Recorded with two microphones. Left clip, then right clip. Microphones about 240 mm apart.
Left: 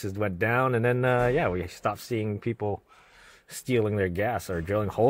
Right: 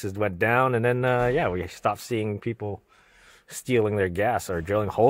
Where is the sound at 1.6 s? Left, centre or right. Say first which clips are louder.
Right 3 dB; right.